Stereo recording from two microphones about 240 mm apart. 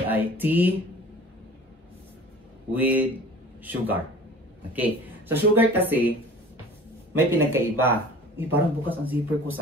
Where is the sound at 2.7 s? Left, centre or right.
Centre.